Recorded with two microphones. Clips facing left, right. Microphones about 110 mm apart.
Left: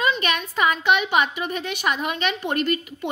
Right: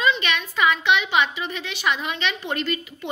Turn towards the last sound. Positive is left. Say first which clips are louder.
# left 4 dB
turn(degrees=50)  # may be behind; listen again after turning